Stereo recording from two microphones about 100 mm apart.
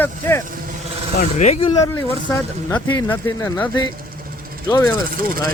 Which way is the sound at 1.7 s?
30° left (ahead or behind).